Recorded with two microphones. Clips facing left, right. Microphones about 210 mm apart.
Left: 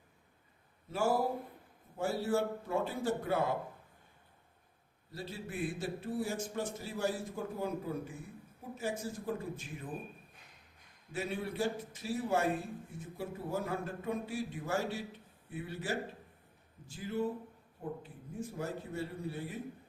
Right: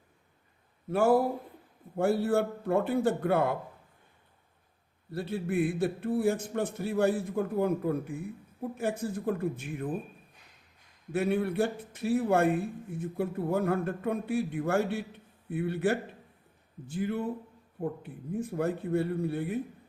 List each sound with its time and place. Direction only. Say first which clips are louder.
0.9 s a man's voice: right 7 dB; 60° right (ahead or behind)
5.1 s a man's voice: right 11 dB; 60° right (ahead or behind)
11.1 s a man's voice: right 10 dB; 60° right (ahead or behind)